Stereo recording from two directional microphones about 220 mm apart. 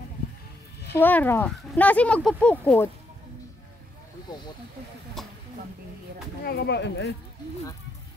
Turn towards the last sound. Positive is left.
turn(degrees=50)  # may be behind; listen again after turning